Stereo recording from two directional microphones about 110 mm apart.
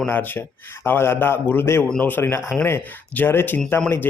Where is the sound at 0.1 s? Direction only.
20° left (ahead or behind).